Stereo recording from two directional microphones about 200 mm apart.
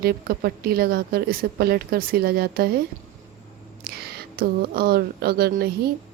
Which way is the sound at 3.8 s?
50° right (ahead or behind).